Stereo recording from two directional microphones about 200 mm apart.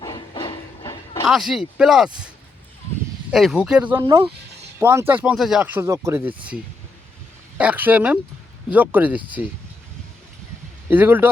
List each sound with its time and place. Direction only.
0.0 s a sound: 20° left (ahead or behind)
1.3 s speech: centre (ahead or behind)
3.3 s speech: centre (ahead or behind)
4.0 s speech: 25° right (ahead or behind)
4.8 s speech: 10° right (ahead or behind)
7.6 s speech: 10° right (ahead or behind)
10.8 s speech: 10° right (ahead or behind)